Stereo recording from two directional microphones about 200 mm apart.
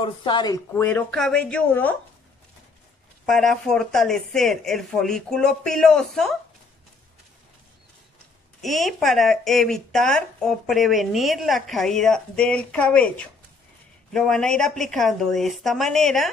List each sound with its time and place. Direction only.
0.0 s speech: 25° left (ahead or behind)
0.7 s speech: 10° left (ahead or behind)
3.3 s speech: centre (ahead or behind)
8.6 s speech: centre (ahead or behind)